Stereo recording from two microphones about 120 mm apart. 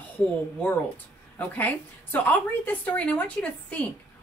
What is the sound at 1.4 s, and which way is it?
A woman's voice, 15° left (ahead or behind).